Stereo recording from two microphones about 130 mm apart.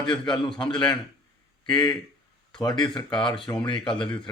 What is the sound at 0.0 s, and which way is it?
Speech, 40° left (ahead or behind).